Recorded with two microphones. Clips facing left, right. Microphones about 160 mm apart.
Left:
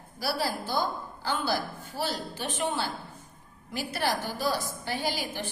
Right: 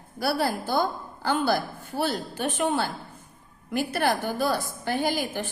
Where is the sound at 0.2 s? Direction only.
55° right (ahead or behind).